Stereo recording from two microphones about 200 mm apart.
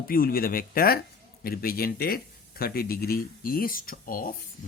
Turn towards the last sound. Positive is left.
turn(degrees=45)  # may be behind; listen again after turning